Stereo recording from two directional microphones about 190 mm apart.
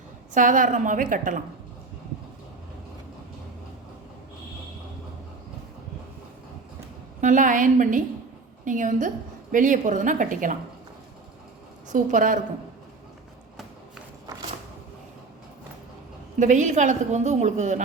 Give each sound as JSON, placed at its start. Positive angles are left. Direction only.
{"t": 0.3, "sound": "a woman's voice", "side_deg": -45}
{"t": 7.2, "sound": "a woman's voice", "side_deg": -40}
{"t": 11.9, "sound": "a woman's voice", "side_deg": -40}
{"t": 16.4, "sound": "a woman's voice", "side_deg": -40}